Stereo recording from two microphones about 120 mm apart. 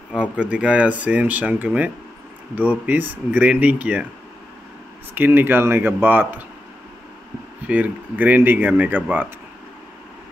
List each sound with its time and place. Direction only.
0.1 s speech: 10° right (ahead or behind)
5.1 s speech: 15° right (ahead or behind)
7.6 s speech: 10° right (ahead or behind)